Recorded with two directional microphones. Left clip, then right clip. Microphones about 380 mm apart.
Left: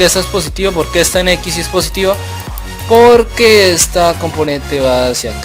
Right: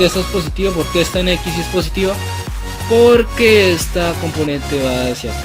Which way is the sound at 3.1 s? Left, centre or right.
Centre.